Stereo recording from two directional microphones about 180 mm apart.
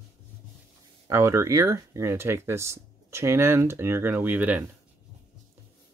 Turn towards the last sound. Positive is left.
turn(degrees=-10)  # may be behind; listen again after turning